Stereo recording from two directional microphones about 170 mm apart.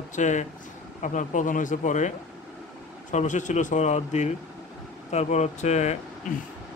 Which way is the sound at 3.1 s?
45° left (ahead or behind).